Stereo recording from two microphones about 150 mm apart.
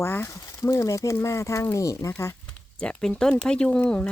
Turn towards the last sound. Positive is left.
turn(degrees=5)  # may be behind; listen again after turning